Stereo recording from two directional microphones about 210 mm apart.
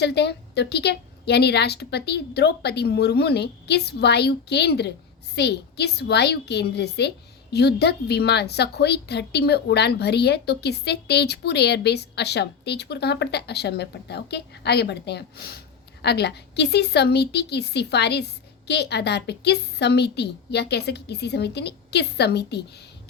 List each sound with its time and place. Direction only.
0.0 s a woman's voice: 50° left (ahead or behind)